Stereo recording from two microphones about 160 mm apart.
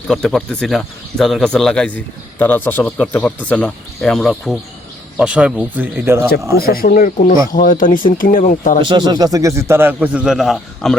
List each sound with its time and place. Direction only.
0.1 s a man's voice: centre (ahead or behind); by 6.3 s 15° right (ahead or behind)
6.6 s speech: 65° left (ahead or behind)
8.8 s a man's voice: 30° right (ahead or behind); by 10.9 s centre (ahead or behind)